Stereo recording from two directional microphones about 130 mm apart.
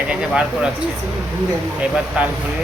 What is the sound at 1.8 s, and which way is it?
Speech, 10° right (ahead or behind).